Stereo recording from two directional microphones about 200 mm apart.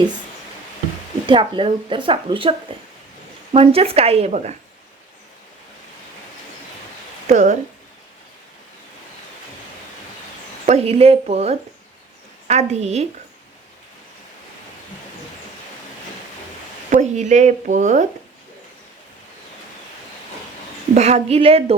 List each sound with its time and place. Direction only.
1.3 s speech: 25° right (ahead or behind)
7.3 s speech: 35° right (ahead or behind)
10.7 s speech: 30° right (ahead or behind)
16.9 s speech: 35° right (ahead or behind)
20.9 s speech: 35° right (ahead or behind)